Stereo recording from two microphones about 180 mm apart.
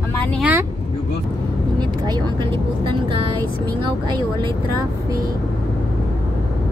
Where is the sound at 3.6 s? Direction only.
25° right (ahead or behind).